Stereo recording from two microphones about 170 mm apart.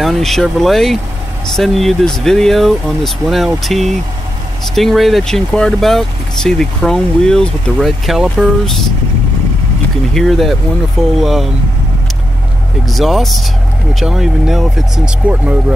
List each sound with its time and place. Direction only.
0.0 s speech: centre (ahead or behind)
10.1 s speech: centre (ahead or behind)
12.8 s speech: centre (ahead or behind)